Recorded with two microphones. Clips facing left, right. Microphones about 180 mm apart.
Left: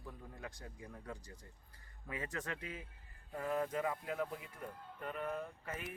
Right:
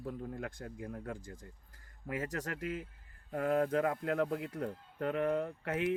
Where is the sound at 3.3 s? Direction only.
65° right (ahead or behind).